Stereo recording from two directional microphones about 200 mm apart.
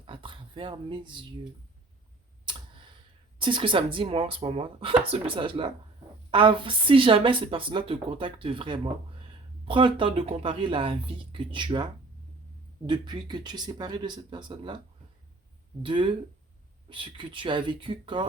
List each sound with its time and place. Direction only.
0.0 s a sound: 25° right (ahead or behind)
3.3 s speech: 25° right (ahead or behind)
12.9 s speech: 20° right (ahead or behind)
15.8 s speech: 25° right (ahead or behind)